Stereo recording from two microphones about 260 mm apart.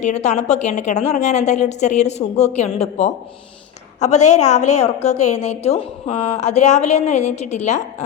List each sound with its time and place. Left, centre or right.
0.0 s a woman's voice: left